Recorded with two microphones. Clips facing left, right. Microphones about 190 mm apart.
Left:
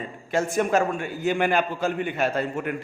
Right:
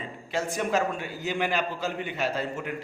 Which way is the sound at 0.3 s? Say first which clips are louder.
Left 5 dB; 50° left (ahead or behind).